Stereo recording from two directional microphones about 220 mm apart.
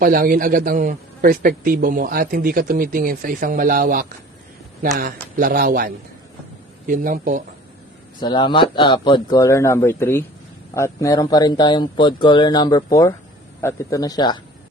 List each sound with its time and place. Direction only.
0.0 s a man's voice: 40° right (ahead or behind)
8.2 s a man's voice: 20° left (ahead or behind)